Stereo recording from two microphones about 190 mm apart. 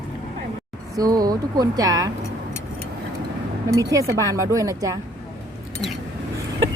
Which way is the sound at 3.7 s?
15° right (ahead or behind).